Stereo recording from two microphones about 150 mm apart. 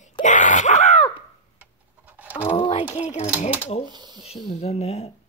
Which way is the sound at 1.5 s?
10° right (ahead or behind).